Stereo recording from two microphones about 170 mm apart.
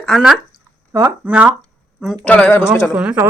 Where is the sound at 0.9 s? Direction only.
15° right (ahead or behind).